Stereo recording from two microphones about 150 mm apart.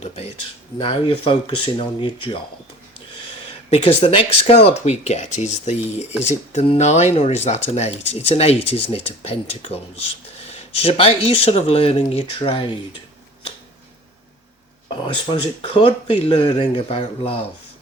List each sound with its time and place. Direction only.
0.8 s speech: 35° left (ahead or behind)
3.7 s speech: 40° left (ahead or behind)
14.8 s speech: 35° left (ahead or behind)